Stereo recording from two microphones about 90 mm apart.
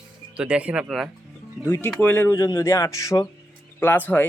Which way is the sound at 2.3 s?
40° left (ahead or behind).